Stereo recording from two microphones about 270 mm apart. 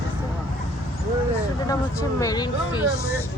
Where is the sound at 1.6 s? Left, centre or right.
Centre.